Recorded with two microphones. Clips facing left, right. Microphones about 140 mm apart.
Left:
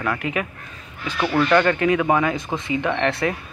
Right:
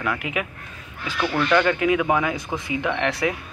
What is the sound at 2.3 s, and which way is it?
Speech, 20° left (ahead or behind).